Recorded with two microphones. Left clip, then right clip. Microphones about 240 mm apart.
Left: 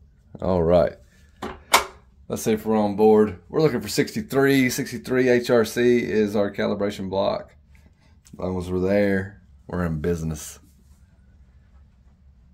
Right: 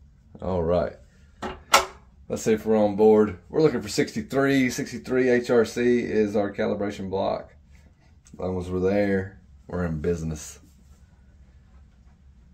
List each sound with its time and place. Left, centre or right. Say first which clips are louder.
0.4 s speech: left 6 dB; left
2.2 s speech: even; left